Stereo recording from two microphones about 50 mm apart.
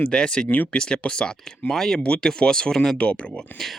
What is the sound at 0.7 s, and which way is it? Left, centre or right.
Speech, left.